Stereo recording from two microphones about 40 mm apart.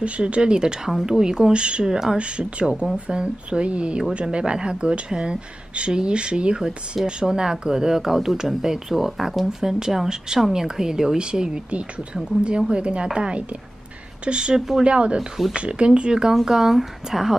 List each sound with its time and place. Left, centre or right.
0.0 s speech: right
0.8 s speech: centre; by 2.0 s right
3.1 s speech: right
15.1 s speech: centre
15.5 s speech: right; by 17.4 s centre